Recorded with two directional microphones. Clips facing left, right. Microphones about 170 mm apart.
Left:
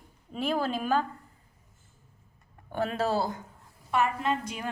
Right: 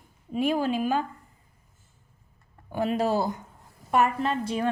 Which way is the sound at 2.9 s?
15° right (ahead or behind).